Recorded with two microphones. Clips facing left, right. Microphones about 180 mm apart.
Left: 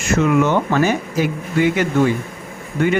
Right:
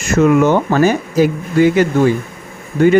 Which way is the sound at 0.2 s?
40° right (ahead or behind).